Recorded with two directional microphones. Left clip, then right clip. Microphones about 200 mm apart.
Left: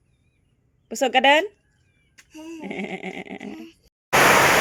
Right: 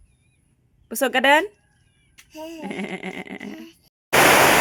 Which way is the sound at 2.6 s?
5° right (ahead or behind).